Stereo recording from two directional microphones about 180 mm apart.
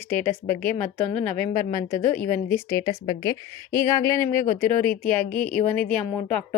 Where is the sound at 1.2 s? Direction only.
15° left (ahead or behind).